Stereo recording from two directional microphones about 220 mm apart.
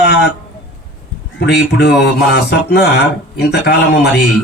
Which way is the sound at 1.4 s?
50° left (ahead or behind).